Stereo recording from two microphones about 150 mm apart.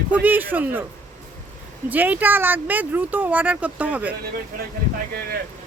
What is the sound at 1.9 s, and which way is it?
Speech, 10° right (ahead or behind).